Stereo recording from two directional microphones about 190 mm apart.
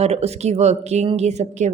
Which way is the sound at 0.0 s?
35° right (ahead or behind).